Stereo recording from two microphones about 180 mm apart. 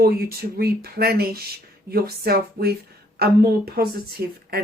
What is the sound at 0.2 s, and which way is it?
Speech, 60° right (ahead or behind).